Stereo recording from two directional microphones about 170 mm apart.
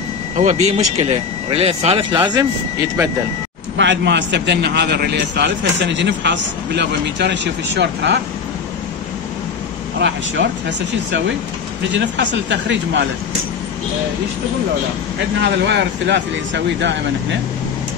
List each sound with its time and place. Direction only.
0.4 s speech: 40° right (ahead or behind)
3.7 s a man's voice: 90° right
9.9 s a man's voice: 90° right
11.9 s a man's voice: 90° right
15.4 s a man's voice: 90° right